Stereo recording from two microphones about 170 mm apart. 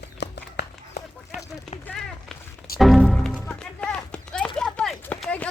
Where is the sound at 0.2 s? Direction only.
85° left.